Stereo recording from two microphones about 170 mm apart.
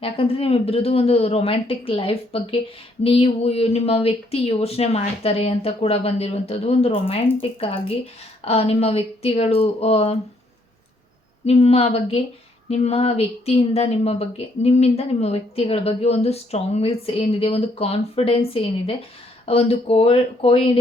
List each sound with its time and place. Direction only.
0.0 s speech: 35° left (ahead or behind)
11.4 s speech: 40° left (ahead or behind)